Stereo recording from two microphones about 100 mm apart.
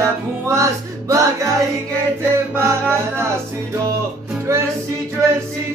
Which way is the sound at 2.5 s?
25° right (ahead or behind).